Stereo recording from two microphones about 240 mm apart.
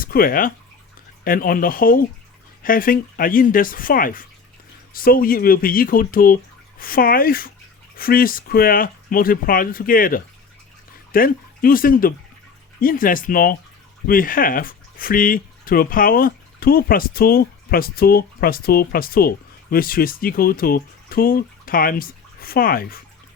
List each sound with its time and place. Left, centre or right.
0.0 s speech: left